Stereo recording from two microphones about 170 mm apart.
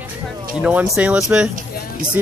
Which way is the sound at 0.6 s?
5° right (ahead or behind).